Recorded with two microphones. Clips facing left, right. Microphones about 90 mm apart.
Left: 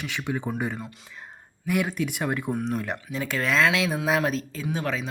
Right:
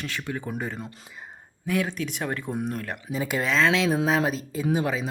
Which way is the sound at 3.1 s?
10° right (ahead or behind).